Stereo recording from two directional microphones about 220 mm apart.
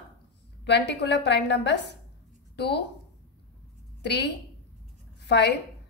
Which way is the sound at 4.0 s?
50° left (ahead or behind).